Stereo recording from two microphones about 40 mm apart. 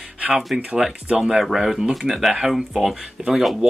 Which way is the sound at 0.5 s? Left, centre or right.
Centre.